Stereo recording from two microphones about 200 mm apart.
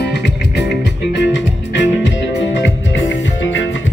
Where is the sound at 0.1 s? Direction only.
60° left (ahead or behind).